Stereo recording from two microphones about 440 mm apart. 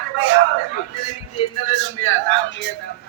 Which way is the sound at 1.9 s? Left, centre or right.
Left.